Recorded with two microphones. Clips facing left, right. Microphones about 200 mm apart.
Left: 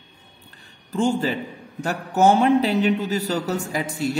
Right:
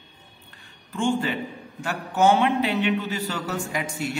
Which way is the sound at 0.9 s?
35° left (ahead or behind).